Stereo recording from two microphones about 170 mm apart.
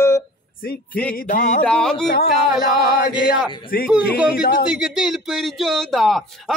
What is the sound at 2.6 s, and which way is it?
Chant, 60° left (ahead or behind).